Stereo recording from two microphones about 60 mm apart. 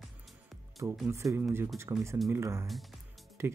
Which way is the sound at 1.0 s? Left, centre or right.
Right.